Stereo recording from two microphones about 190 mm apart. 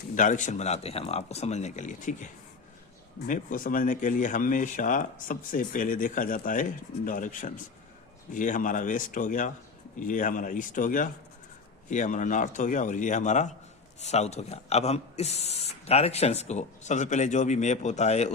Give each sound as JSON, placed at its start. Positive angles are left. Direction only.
{"t": 0.2, "sound": "speech", "side_deg": 40}
{"t": 3.2, "sound": "speech", "side_deg": 45}